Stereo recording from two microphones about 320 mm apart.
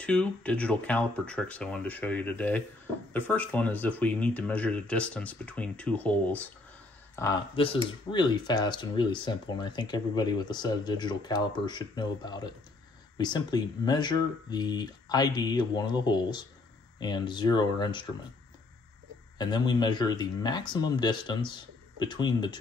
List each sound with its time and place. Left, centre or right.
0.0 s speech: centre
19.3 s speech: centre